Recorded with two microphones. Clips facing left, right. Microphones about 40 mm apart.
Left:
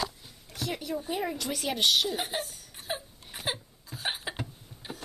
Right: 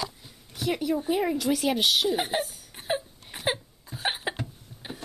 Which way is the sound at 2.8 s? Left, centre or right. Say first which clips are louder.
Right 7 dB; right.